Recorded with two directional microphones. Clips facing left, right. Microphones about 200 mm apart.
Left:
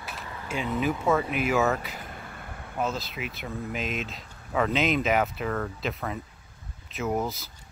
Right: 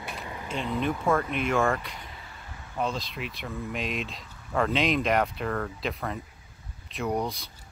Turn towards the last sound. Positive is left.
turn(degrees=5)  # may be behind; listen again after turning